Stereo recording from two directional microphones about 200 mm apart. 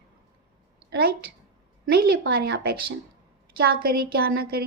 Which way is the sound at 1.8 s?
55° right (ahead or behind).